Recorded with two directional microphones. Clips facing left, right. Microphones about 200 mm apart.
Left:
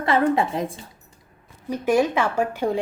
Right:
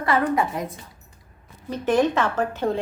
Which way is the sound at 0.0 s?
25° left (ahead or behind).